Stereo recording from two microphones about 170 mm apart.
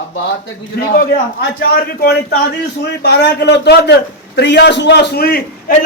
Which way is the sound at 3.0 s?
80° left.